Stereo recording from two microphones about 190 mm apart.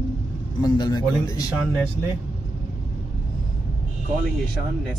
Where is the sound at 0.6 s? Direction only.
20° left (ahead or behind).